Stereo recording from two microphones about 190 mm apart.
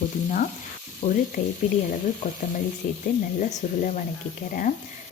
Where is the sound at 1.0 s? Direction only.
45° left (ahead or behind).